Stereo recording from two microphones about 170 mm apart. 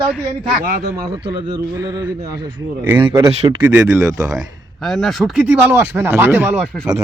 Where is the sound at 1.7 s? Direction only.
15° right (ahead or behind).